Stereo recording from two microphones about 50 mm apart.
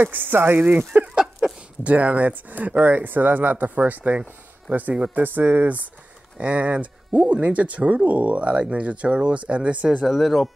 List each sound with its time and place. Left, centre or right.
0.0 s speech: right
0.7 s a sound: right
1.8 s speech: right
10.0 s speech: centre